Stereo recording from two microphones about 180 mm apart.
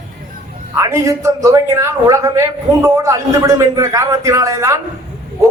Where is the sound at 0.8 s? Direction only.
15° right (ahead or behind).